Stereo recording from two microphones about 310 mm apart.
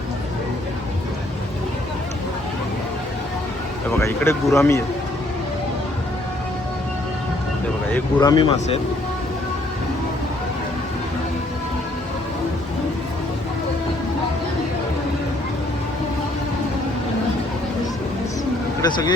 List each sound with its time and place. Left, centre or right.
3.8 s speech: centre
7.9 s speech: centre
18.8 s speech: centre